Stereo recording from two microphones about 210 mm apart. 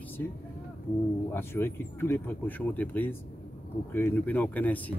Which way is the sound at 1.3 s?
10° left (ahead or behind).